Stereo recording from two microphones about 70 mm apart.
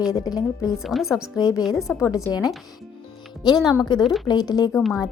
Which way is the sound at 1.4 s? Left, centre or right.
Left.